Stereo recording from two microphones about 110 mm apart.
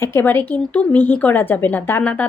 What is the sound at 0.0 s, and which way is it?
A woman's voice, 20° left (ahead or behind).